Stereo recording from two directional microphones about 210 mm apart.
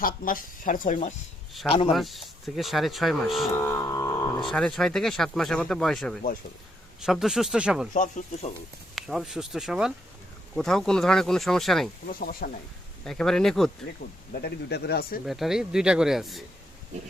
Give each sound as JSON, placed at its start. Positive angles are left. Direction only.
{"t": 0.0, "sound": "speech", "side_deg": 40}
{"t": 1.9, "sound": "speech", "side_deg": 0}
{"t": 3.6, "sound": "music", "side_deg": 15}
{"t": 4.4, "sound": "speech", "side_deg": 0}
{"t": 7.9, "sound": "speech", "side_deg": 35}
{"t": 9.0, "sound": "speech", "side_deg": 0}
{"t": 12.0, "sound": "speech", "side_deg": 45}
{"t": 13.1, "sound": "speech", "side_deg": 0}
{"t": 14.0, "sound": "speech", "side_deg": 45}
{"t": 15.3, "sound": "speech", "side_deg": 0}